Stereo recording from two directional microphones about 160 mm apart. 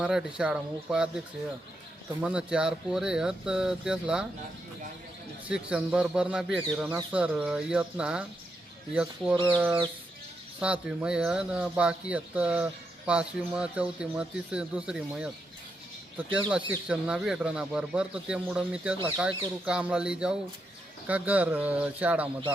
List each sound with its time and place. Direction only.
0.0 s speech: 5° right (ahead or behind)
2.2 s speech: 5° right (ahead or behind)
5.5 s speech: 5° right (ahead or behind)
9.3 s speech: 25° right (ahead or behind)
10.6 s speech: 5° right (ahead or behind)
16.5 s speech: 5° right (ahead or behind)